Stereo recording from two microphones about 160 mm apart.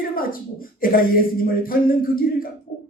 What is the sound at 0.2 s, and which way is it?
Speech, 65° left (ahead or behind).